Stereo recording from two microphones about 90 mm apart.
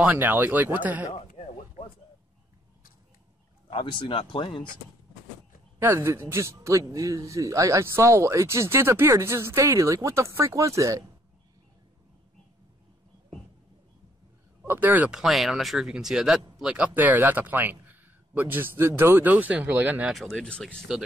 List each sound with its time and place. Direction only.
0.0 s speech: 20° right (ahead or behind)
1.4 s a sound: 90° left
3.7 s speech: 65° left (ahead or behind)
5.8 s speech: 30° right (ahead or behind)
14.7 s speech: 20° right (ahead or behind)
15.1 s speech: centre (ahead or behind); by 20.1 s 20° right (ahead or behind)
20.1 s speech: centre (ahead or behind)